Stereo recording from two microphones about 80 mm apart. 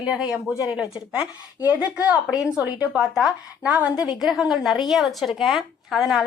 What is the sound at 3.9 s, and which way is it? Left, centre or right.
A woman's voice, centre.